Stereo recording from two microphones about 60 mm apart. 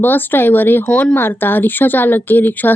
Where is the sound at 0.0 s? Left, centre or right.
Left.